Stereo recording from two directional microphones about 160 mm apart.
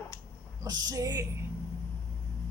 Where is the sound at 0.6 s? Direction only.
25° right (ahead or behind).